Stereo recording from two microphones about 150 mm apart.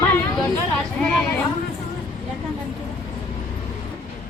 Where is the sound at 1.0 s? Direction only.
5° left (ahead or behind).